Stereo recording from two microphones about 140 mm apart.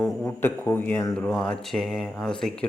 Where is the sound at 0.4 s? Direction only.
15° left (ahead or behind).